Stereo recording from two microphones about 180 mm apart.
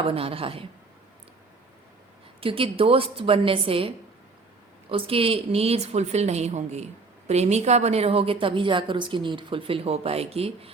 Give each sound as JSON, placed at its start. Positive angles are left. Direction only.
{"t": 0.0, "sound": "a woman's voice", "side_deg": -30}
{"t": 2.4, "sound": "a woman's voice", "side_deg": -30}